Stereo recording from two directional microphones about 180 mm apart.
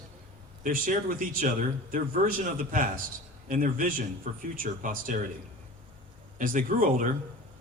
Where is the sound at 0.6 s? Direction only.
50° right (ahead or behind).